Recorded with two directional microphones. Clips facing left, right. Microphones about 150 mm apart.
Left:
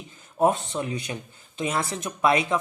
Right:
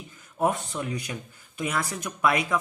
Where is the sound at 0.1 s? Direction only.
25° left (ahead or behind).